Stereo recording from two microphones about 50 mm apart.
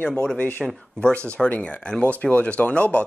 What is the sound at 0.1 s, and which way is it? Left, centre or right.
Speech, centre.